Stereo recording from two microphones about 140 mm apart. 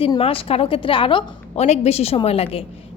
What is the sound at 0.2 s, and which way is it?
A woman's voice, 45° left (ahead or behind).